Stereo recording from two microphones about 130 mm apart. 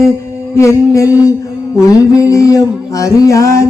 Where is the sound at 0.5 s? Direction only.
20° left (ahead or behind).